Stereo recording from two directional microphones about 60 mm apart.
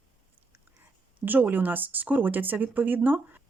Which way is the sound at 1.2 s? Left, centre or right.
Right.